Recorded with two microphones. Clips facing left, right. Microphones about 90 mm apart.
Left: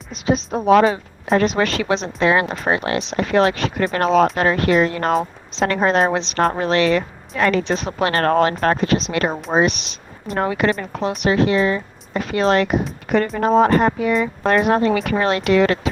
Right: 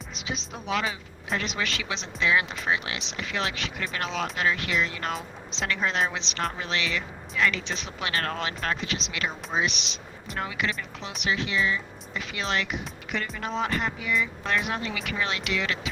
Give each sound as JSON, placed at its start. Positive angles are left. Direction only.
{"t": 0.3, "sound": "speech", "side_deg": 45}